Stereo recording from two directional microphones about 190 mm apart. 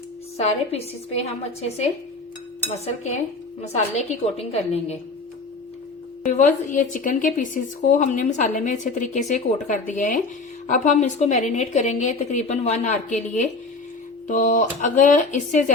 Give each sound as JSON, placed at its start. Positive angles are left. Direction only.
{"t": 0.3, "sound": "speech", "side_deg": 35}
{"t": 6.2, "sound": "speech", "side_deg": 40}